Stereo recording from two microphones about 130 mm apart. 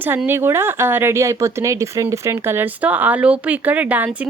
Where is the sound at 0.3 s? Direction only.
20° right (ahead or behind).